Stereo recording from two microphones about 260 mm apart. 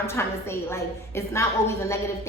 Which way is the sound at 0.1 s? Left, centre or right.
Centre.